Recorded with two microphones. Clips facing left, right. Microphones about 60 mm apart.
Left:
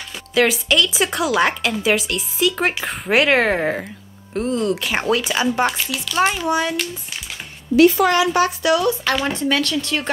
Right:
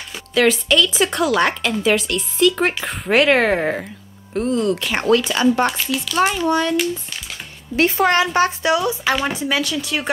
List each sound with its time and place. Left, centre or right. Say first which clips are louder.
0.3 s a woman's voice: right 1 dB; centre
7.7 s a woman's voice: left 3 dB; right
8.3 s a woman's voice: even; right
9.0 s speech: even; centre